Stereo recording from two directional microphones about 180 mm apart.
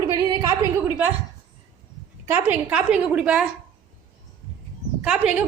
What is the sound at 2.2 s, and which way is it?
A woman's voice, 10° right (ahead or behind).